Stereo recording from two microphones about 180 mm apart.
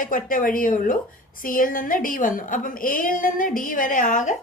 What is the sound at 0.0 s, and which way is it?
A woman's voice, 50° left (ahead or behind).